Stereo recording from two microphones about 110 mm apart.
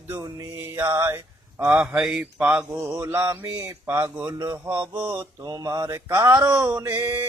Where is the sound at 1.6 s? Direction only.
10° right (ahead or behind).